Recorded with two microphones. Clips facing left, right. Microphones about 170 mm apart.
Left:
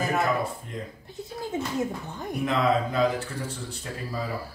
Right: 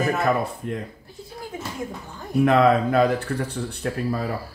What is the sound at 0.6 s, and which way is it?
Speech, 70° right (ahead or behind).